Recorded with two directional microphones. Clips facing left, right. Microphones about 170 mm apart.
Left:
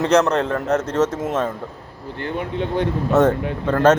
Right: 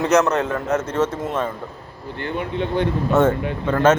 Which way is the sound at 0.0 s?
30° left (ahead or behind).